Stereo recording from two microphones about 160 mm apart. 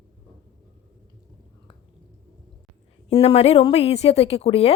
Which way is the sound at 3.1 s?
35° left (ahead or behind).